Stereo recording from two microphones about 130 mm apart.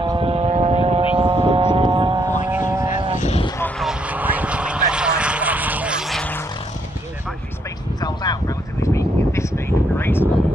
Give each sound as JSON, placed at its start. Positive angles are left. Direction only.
{"t": 0.2, "sound": "vehicle", "side_deg": -50}
{"t": 2.4, "sound": "vehicle", "side_deg": -20}
{"t": 8.0, "sound": "a sound", "side_deg": 30}